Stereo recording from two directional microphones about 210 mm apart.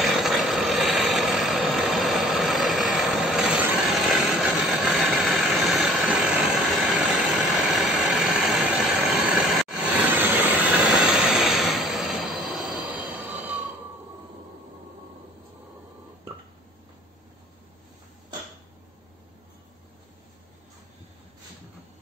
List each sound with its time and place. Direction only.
0.0 s vehicle: centre (ahead or behind)